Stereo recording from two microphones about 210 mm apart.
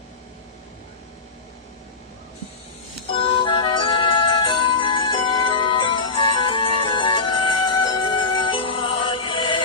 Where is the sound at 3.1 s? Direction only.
25° left (ahead or behind).